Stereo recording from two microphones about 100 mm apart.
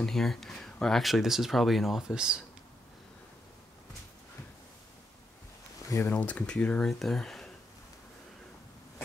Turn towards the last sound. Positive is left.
turn(degrees=5)  # may be behind; listen again after turning